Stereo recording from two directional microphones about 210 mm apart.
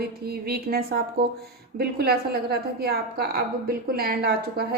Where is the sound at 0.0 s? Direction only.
50° right (ahead or behind).